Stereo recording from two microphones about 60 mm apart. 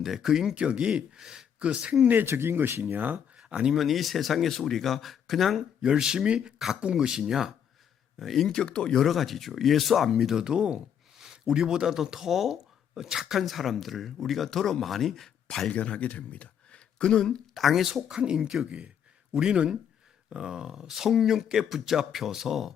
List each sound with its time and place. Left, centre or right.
0.0 s speech: centre
0.5 s speech: centre
2.1 s speech: right
3.3 s a sound: centre
3.8 s speech: centre
5.8 s speech: centre
8.4 s speech: centre
9.0 s speech: centre
15.7 s speech: left
17.5 s speech: centre